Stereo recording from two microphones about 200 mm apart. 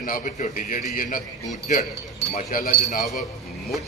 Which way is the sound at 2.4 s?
45° left (ahead or behind).